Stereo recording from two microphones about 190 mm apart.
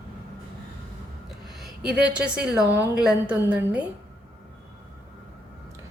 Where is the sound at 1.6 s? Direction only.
5° right (ahead or behind).